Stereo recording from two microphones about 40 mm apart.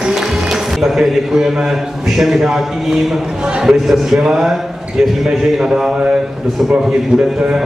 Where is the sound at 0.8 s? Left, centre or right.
Centre.